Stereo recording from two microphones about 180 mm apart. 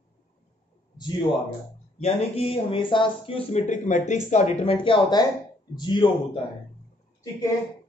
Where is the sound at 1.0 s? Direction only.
25° left (ahead or behind).